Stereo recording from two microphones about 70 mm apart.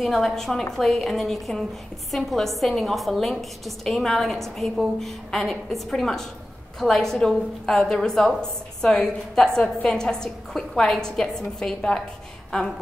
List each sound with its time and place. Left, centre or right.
0.0 s a woman's voice: centre